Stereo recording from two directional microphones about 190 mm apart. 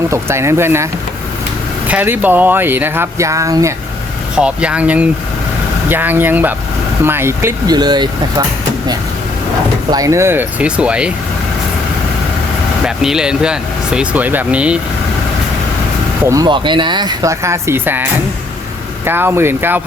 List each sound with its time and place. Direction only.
0.1 s speech: 15° right (ahead or behind)
1.9 s speech: 10° right (ahead or behind)
4.4 s speech: 5° right (ahead or behind); by 8.4 s 20° right (ahead or behind)
9.9 s speech: 15° right (ahead or behind)
12.8 s speech: 5° right (ahead or behind)
16.2 s speech: 20° right (ahead or behind)
19.0 s speech: 10° right (ahead or behind)